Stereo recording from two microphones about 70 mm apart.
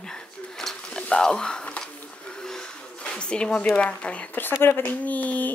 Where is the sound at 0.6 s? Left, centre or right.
Centre.